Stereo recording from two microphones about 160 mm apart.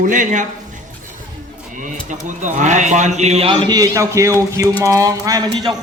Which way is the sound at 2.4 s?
50° right (ahead or behind).